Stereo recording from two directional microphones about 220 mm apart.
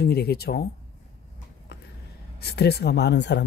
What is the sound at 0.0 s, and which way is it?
Speech, 45° left (ahead or behind).